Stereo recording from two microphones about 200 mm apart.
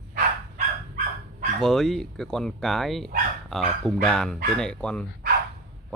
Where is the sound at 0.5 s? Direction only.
40° right (ahead or behind).